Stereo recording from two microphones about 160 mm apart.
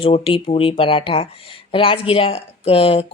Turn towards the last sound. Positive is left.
turn(degrees=35)  # may be behind; listen again after turning